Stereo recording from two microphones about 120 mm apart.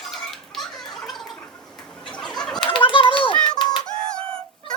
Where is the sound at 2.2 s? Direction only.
5° left (ahead or behind).